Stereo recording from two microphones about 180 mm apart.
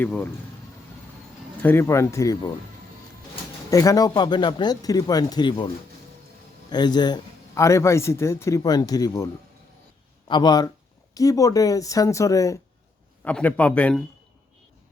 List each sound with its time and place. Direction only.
0.0 s a man's voice: 10° left (ahead or behind)
1.6 s a man's voice: 15° left (ahead or behind)
3.7 s a man's voice: 20° left (ahead or behind)